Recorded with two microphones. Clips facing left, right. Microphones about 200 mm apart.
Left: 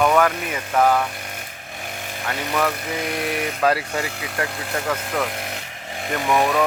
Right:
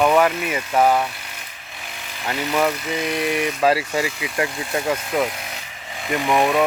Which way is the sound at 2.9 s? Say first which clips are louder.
Right 3 dB; 50° left (ahead or behind).